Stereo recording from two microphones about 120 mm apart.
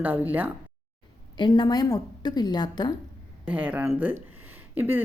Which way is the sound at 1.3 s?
40° left (ahead or behind).